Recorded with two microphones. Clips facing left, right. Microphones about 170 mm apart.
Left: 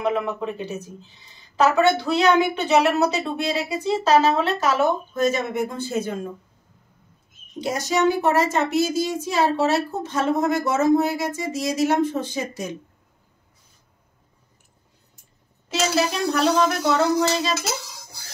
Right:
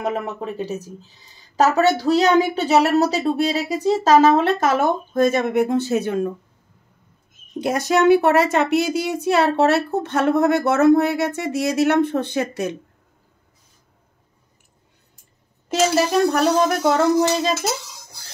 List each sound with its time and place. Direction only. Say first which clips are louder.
1.6 s a woman's voice: right 1 dB; 40° right (ahead or behind); by 6.1 s 75° right (ahead or behind)
7.6 s speech: right 4 dB; 55° right (ahead or behind)
15.7 s speech: right 5 dB; 50° right (ahead or behind)